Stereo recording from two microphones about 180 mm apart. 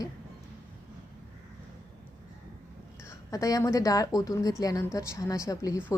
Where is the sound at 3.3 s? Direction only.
20° left (ahead or behind).